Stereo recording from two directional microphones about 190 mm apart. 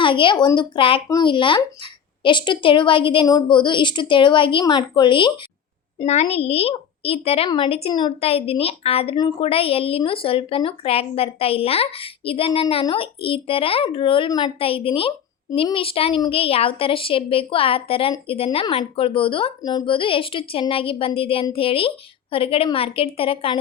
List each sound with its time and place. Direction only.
0.0 s a woman's voice: 25° left (ahead or behind)